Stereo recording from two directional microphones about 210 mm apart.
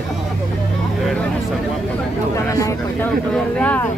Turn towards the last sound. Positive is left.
turn(degrees=5)  # may be behind; listen again after turning